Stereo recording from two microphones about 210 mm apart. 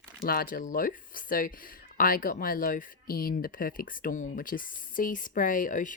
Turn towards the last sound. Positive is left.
turn(degrees=40)  # may be behind; listen again after turning